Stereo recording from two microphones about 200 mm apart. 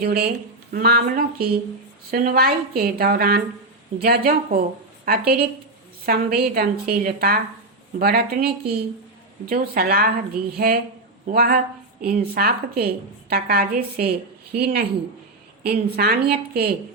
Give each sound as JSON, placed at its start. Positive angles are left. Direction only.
{"t": 0.0, "sound": "speech", "side_deg": -50}
{"t": 11.3, "sound": "speech", "side_deg": -50}